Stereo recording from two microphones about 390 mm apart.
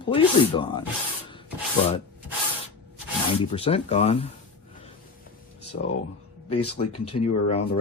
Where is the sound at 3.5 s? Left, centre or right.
Centre.